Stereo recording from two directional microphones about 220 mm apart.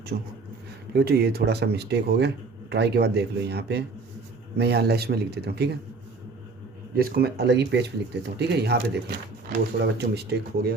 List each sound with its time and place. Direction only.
0.1 s a man's voice: 40° right (ahead or behind)
6.9 s speech: 45° right (ahead or behind)